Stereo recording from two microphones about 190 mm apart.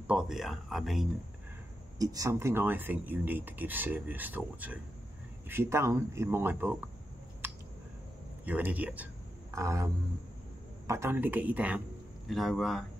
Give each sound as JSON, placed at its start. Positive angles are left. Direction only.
{"t": 0.0, "sound": "speech", "side_deg": -5}
{"t": 2.0, "sound": "speech", "side_deg": -20}
{"t": 8.5, "sound": "speech", "side_deg": -10}
{"t": 10.9, "sound": "speech", "side_deg": -10}